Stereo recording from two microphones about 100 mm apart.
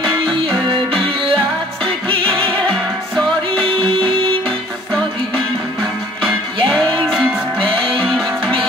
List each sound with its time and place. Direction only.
2.0 s music: 65° right (ahead or behind)
3.8 s music: 65° right (ahead or behind)
6.2 s music: 10° left (ahead or behind)